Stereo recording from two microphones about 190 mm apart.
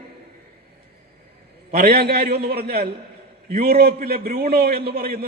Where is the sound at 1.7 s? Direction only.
50° right (ahead or behind).